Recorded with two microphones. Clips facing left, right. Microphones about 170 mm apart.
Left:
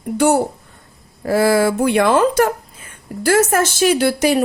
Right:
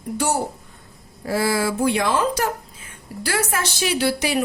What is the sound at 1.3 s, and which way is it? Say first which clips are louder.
Speech: left 7 dB; 55° left (ahead or behind).